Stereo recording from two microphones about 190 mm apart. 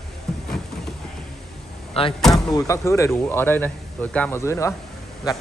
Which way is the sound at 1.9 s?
30° left (ahead or behind).